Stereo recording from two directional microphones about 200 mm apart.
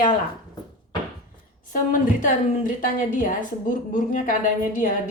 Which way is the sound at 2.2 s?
40° left (ahead or behind).